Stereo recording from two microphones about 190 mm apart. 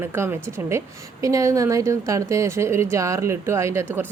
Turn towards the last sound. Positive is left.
turn(degrees=-15)  # may be behind; listen again after turning